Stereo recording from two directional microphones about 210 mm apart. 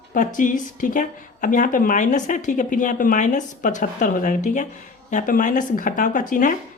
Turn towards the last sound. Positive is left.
turn(degrees=40)  # may be behind; listen again after turning